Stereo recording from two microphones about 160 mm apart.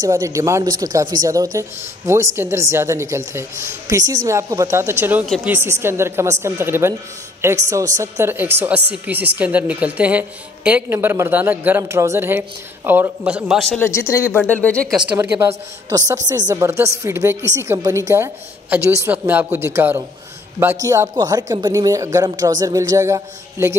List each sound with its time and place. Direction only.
0.0 s a woman's voice: 20° right (ahead or behind)
5.2 s speech: centre (ahead or behind)
5.5 s a woman's voice: 15° right (ahead or behind)
13.7 s speech: 15° left (ahead or behind)
15.1 s a woman's voice: 15° right (ahead or behind)